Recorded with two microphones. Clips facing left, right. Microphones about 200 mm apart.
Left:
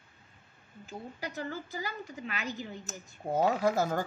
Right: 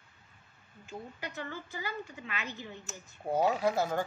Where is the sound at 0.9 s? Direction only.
35° left (ahead or behind).